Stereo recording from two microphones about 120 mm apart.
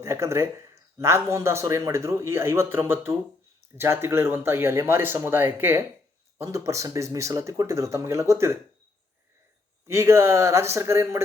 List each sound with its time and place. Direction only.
0.0 s speech: 25° right (ahead or behind)
9.8 s speech: 25° right (ahead or behind)